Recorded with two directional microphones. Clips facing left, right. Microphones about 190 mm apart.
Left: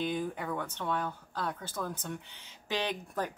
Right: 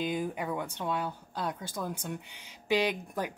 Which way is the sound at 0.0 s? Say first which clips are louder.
Right 1 dB; 10° right (ahead or behind).